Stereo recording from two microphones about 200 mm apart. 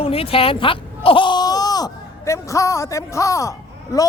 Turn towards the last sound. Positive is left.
turn(degrees=15)  # may be behind; listen again after turning